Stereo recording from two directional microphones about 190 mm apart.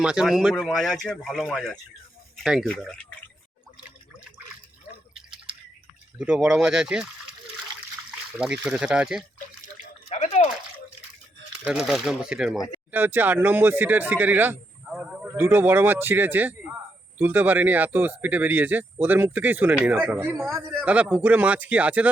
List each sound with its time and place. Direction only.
0.0 s speech: 5° right (ahead or behind)
6.1 s speech: 5° right (ahead or behind)
8.4 s speech: 5° right (ahead or behind)
10.1 s a sound: 35° left (ahead or behind)
11.6 s speech: 5° right (ahead or behind)
14.8 s a sound: centre (ahead or behind)
15.3 s speech: 10° right (ahead or behind)